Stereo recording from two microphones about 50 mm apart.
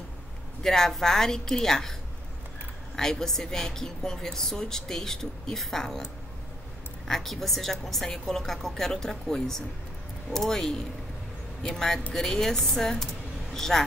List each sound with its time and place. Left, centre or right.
0.6 s a woman's voice: centre
3.0 s a woman's voice: centre
7.1 s a woman's voice: centre